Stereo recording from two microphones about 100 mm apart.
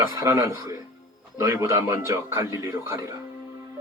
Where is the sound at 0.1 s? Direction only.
35° right (ahead or behind).